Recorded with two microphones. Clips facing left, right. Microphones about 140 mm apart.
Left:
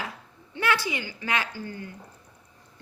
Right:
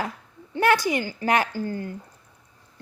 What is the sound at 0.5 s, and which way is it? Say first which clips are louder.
A woman's voice: right 6 dB; 45° right (ahead or behind).